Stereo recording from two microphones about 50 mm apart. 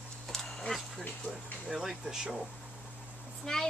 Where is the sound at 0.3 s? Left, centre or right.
Centre.